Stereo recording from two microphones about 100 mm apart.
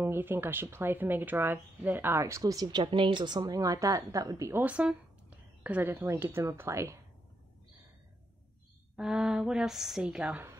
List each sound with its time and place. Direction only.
0.0 s speech: 20° right (ahead or behind)
4.6 s a woman's voice: 10° right (ahead or behind); by 7.0 s 30° right (ahead or behind)
8.9 s a woman's voice: 5° right (ahead or behind)